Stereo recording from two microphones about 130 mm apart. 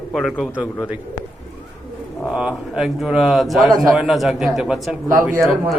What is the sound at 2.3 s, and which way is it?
Speech, 5° right (ahead or behind).